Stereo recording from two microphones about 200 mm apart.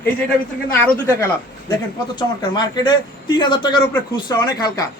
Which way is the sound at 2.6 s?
20° left (ahead or behind).